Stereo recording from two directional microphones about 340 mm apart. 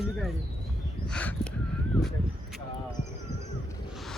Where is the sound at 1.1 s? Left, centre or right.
Centre.